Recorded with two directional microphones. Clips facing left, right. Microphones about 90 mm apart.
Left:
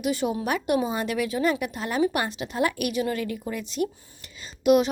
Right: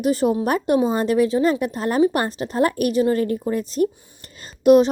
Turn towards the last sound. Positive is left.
turn(degrees=-35)  # may be behind; listen again after turning